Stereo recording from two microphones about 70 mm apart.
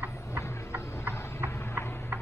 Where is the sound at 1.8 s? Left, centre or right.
Left.